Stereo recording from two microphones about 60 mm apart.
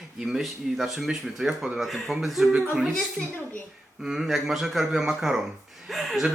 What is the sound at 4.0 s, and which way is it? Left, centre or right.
A man's voice, centre.